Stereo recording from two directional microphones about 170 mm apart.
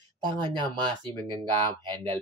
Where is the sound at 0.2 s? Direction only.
30° right (ahead or behind).